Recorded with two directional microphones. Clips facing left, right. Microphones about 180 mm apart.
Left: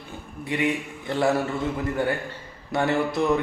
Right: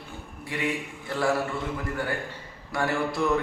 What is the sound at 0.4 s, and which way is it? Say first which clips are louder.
Speech: left 5 dB; 20° left (ahead or behind).